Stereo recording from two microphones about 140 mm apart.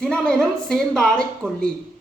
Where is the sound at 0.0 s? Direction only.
5° left (ahead or behind).